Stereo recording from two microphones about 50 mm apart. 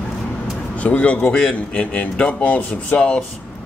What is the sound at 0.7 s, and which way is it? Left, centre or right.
A man's voice, left.